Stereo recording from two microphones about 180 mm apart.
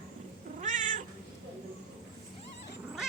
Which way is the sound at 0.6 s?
45° right (ahead or behind).